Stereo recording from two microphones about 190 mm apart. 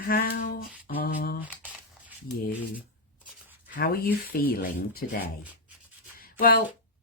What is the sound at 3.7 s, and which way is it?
Speech, 50° left (ahead or behind).